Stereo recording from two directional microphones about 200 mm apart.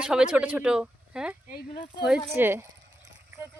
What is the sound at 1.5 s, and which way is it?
Speech, 45° left (ahead or behind).